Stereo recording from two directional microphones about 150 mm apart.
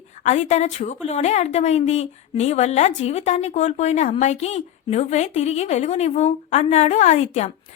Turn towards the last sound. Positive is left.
turn(degrees=50)  # may be behind; listen again after turning